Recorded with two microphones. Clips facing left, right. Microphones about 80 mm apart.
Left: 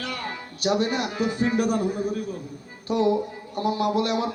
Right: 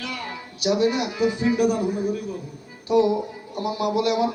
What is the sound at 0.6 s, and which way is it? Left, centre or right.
Speech, left.